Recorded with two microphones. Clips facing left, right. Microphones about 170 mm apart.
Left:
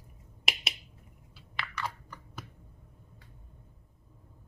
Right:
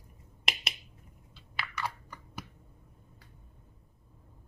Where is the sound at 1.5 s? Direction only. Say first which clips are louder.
Even; 10° right (ahead or behind).